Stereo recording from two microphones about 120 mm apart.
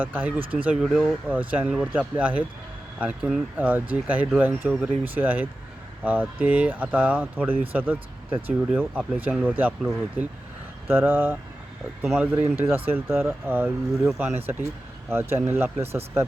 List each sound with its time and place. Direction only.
0.0 s speech: 15° right (ahead or behind)
12.0 s speech: 5° right (ahead or behind)
12.3 s speech: 20° right (ahead or behind)